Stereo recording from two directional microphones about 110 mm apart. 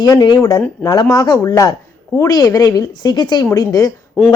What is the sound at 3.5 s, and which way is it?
Speech, 30° left (ahead or behind).